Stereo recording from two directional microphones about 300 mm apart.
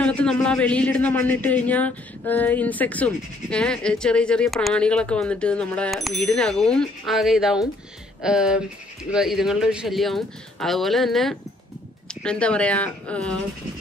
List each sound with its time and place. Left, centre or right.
0.0 s a man's voice: centre